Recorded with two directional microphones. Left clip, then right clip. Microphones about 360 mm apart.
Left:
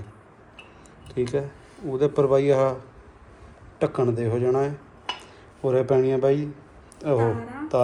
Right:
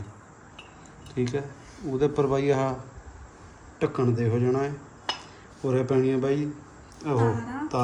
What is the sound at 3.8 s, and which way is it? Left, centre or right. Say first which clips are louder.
A man's voice: left 3 dB; centre.